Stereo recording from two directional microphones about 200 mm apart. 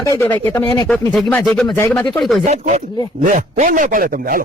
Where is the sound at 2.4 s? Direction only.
40° right (ahead or behind).